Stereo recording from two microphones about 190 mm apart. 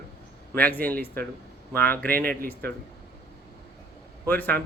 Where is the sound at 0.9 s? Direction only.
55° right (ahead or behind).